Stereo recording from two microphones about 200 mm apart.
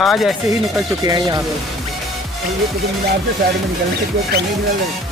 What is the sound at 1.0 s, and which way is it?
Speech, 20° right (ahead or behind).